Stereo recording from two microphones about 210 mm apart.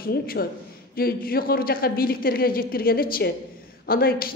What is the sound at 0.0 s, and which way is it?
Speech, 45° left (ahead or behind).